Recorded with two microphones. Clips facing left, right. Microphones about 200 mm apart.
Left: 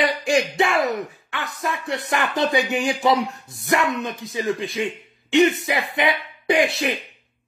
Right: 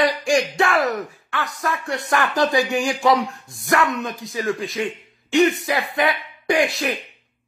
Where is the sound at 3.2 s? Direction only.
20° left (ahead or behind).